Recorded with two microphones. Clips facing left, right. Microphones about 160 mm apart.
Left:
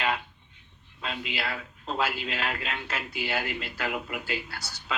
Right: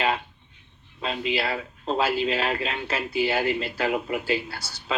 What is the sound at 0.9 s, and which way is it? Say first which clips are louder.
A man's voice: right 7 dB; 30° right (ahead or behind).